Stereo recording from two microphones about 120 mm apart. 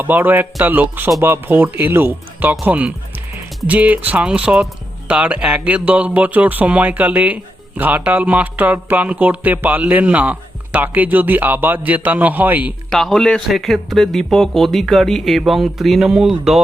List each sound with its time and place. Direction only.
0.0 s speech: 15° right (ahead or behind)
12.9 s speech: centre (ahead or behind)